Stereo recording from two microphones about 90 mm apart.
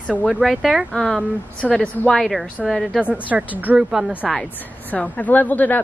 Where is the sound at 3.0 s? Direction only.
15° right (ahead or behind).